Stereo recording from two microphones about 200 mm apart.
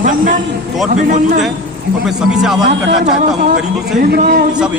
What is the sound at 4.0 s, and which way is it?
Speech, 50° right (ahead or behind).